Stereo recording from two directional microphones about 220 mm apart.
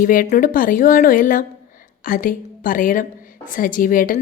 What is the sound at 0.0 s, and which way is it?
A woman's voice, 40° left (ahead or behind).